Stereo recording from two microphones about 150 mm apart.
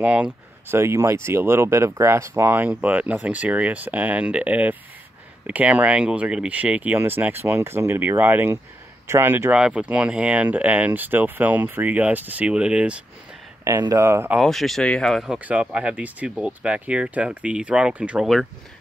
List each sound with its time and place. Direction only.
0.0 s speech: 10° right (ahead or behind)
13.7 s speech: 20° right (ahead or behind)
14.4 s speech: centre (ahead or behind)